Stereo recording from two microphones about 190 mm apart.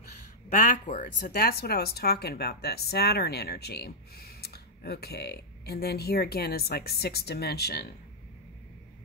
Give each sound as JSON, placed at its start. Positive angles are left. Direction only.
{"t": 0.5, "sound": "speech", "side_deg": 40}